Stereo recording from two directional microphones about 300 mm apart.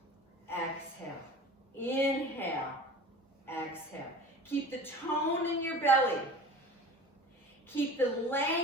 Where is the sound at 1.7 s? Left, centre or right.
Centre.